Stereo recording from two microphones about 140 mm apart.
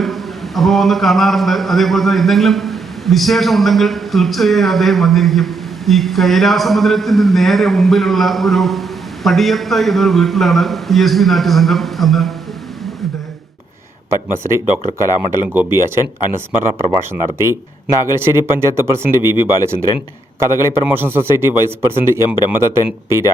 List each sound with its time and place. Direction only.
0.0 s a sound: centre (ahead or behind)
14.1 s a man's voice: 20° right (ahead or behind)
17.4 s a man's voice: 20° right (ahead or behind)